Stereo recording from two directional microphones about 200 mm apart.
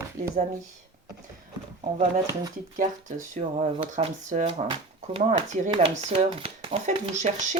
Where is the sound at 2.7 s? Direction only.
40° right (ahead or behind).